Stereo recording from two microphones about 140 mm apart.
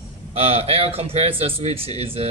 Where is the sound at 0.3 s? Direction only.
45° right (ahead or behind).